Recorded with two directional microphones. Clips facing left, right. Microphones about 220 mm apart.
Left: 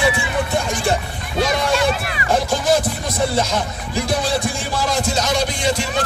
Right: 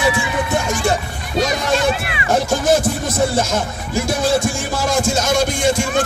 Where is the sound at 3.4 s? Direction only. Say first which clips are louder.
Right 1 dB; 45° right (ahead or behind).